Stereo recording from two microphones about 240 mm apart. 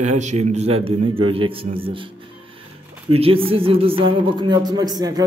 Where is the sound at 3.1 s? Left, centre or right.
Right.